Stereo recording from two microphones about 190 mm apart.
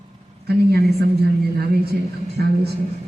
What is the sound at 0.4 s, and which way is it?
Speech, 55° right (ahead or behind).